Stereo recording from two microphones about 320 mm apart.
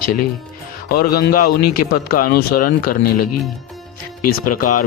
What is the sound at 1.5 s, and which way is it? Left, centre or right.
Speech, left.